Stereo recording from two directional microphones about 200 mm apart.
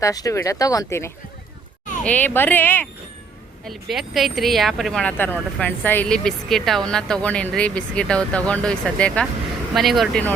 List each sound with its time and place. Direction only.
0.0 s speech: 15° left (ahead or behind)